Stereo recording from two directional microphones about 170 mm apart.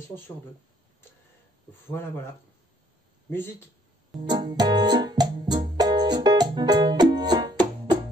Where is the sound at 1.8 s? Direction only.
15° left (ahead or behind).